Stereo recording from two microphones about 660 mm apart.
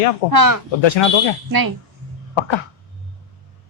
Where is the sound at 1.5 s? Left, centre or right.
Right.